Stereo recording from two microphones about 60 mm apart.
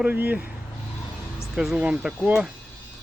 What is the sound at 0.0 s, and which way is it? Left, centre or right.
Speech, right.